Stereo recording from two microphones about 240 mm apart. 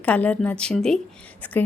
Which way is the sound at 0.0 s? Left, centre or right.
Centre.